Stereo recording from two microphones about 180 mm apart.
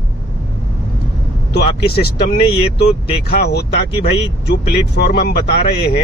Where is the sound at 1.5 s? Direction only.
60° left (ahead or behind).